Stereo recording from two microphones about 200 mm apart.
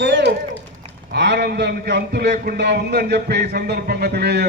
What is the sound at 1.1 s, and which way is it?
A man's voice, 60° right (ahead or behind).